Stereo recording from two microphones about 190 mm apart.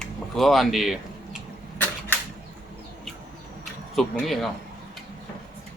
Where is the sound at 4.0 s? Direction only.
Centre (ahead or behind).